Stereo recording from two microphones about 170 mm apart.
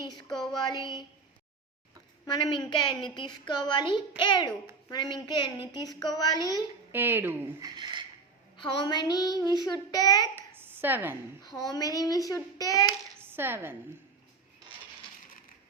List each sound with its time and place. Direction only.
0.0 s child singing: 25° left (ahead or behind)
0.3 s child singing: 5° left (ahead or behind)
0.5 s child singing: 25° left (ahead or behind)
2.2 s child singing: 25° left (ahead or behind)
6.9 s speech: 15° right (ahead or behind)
7.8 s a sound: 25° right (ahead or behind)
8.5 s child singing: 25° left (ahead or behind)
10.3 s a sound: 10° right (ahead or behind)
11.4 s child singing: 20° left (ahead or behind)
13.1 s a sound: 15° right (ahead or behind)